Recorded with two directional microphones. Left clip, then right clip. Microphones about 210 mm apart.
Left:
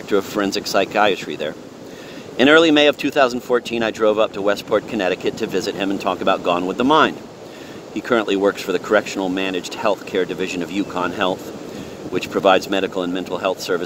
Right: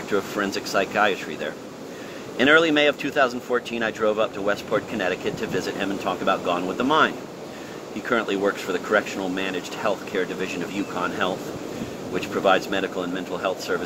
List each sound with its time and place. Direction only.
0.1 s speech: 55° left (ahead or behind)